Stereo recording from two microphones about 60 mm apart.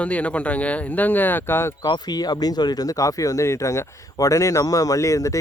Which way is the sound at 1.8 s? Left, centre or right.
Left.